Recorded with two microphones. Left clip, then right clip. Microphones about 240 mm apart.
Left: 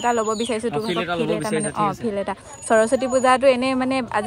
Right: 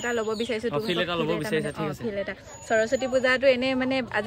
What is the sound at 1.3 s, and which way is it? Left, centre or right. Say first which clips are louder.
Speech: left 5 dB; centre.